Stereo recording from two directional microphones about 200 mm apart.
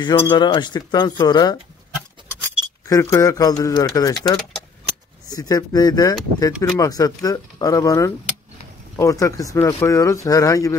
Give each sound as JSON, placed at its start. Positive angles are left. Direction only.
{"t": 0.0, "sound": "speech", "side_deg": 20}
{"t": 2.9, "sound": "speech", "side_deg": 15}